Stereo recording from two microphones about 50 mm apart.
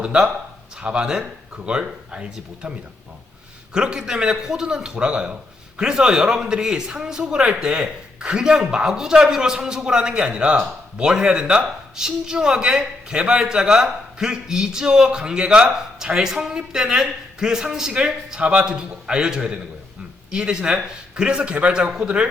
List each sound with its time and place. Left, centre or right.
0.0 s a man's voice: centre
3.8 s a man's voice: centre